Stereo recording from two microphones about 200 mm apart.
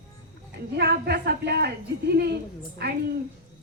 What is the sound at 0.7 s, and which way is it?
A woman's voice, 55° right (ahead or behind).